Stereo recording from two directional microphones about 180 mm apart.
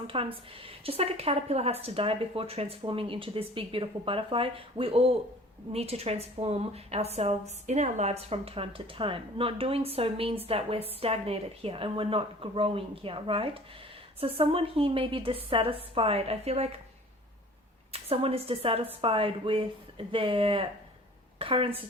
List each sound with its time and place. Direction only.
0.1 s a woman's voice: 30° right (ahead or behind)
17.9 s speech: 30° right (ahead or behind)